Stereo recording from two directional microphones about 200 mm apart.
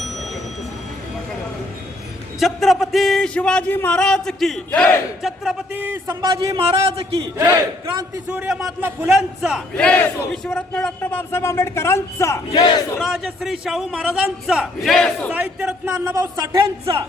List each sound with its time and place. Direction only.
2.4 s a man's voice: centre (ahead or behind); by 6.7 s 20° right (ahead or behind)
6.7 s speech: 30° right (ahead or behind)
7.3 s speech: 20° right (ahead or behind)
8.4 s a man's voice: 5° right (ahead or behind); by 12.4 s 15° left (ahead or behind)
12.5 s battle cry: 20° left (ahead or behind)
13.0 s a man's voice: 5° right (ahead or behind); by 17.1 s 20° right (ahead or behind)